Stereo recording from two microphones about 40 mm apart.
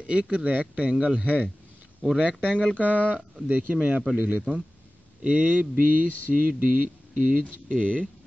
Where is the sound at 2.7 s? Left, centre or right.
Left.